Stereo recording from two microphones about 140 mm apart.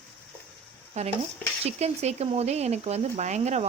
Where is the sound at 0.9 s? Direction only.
50° right (ahead or behind).